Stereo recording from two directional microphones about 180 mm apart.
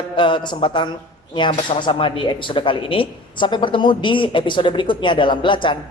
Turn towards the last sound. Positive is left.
turn(degrees=25)  # may be behind; listen again after turning